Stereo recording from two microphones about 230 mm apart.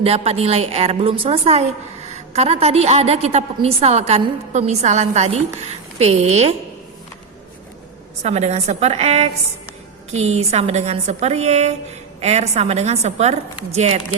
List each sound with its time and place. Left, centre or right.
0.0 s a woman's voice: right
8.2 s a woman's voice: right